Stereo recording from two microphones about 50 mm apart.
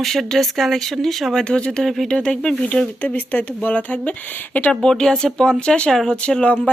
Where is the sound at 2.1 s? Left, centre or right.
Centre.